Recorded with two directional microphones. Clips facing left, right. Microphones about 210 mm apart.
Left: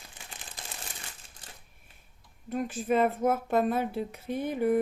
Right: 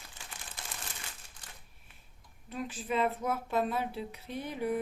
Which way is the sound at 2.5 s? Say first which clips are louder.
Left 7 dB; 50° left (ahead or behind).